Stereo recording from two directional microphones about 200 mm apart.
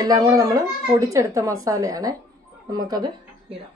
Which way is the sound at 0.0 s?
20° right (ahead or behind).